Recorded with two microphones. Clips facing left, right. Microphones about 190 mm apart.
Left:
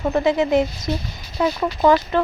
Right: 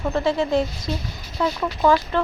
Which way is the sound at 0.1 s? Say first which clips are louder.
Left 3 dB; 15° left (ahead or behind).